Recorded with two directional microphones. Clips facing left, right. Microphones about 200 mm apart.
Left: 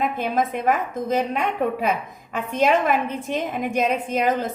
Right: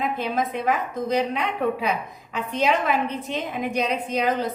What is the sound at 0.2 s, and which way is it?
A woman's voice, 50° left (ahead or behind).